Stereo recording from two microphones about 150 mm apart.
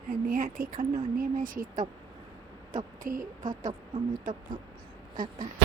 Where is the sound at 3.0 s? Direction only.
65° right (ahead or behind).